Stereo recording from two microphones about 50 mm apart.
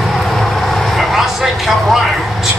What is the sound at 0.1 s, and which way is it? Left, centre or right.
Vehicle, centre.